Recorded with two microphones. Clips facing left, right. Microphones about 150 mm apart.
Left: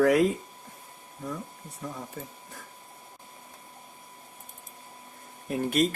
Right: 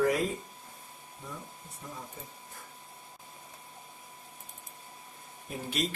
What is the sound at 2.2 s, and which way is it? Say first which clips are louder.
Speech: left 7 dB; 70° left (ahead or behind).